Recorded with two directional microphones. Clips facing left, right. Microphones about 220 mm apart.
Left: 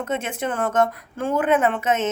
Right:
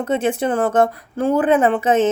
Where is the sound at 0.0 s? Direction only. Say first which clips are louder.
Right 7 dB; 35° right (ahead or behind).